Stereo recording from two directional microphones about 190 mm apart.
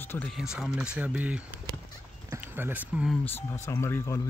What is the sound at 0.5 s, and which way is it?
Speech, 5° right (ahead or behind).